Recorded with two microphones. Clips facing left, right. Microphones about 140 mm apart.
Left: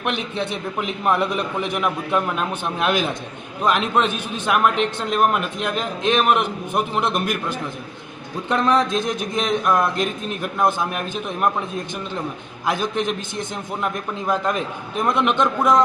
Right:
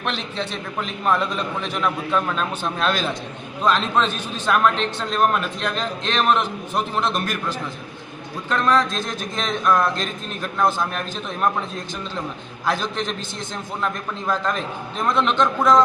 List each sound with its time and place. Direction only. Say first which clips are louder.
0.0 s a man's voice: left 2 dB; 15° left (ahead or behind)
8.4 s a man's voice: left 1 dB; 20° left (ahead or behind)
12.6 s a man's voice: left 2 dB; 15° left (ahead or behind)